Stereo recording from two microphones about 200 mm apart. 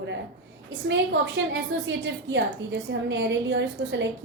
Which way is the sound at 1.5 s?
65° right (ahead or behind).